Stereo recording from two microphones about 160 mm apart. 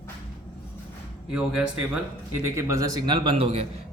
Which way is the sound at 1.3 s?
5° right (ahead or behind).